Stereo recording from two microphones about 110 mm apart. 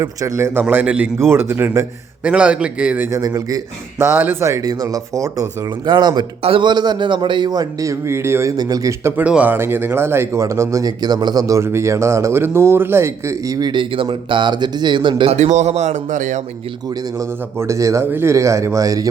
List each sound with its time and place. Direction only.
0.0 s a man's voice: 30° right (ahead or behind)
2.2 s a man's voice: 10° right (ahead or behind)
3.1 s a man's voice: 30° right (ahead or behind)
3.9 s speech: 20° right (ahead or behind); by 6.2 s 40° right (ahead or behind)
6.4 s a man's voice: 50° right (ahead or behind); by 9.2 s 25° right (ahead or behind)
9.2 s speech: 10° right (ahead or behind)
13.6 s speech: 45° right (ahead or behind)
15.3 s a man's voice: 90° right
17.2 s speech: 30° right (ahead or behind)